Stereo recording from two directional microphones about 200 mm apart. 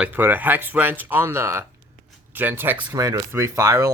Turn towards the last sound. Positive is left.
turn(degrees=-15)  # may be behind; listen again after turning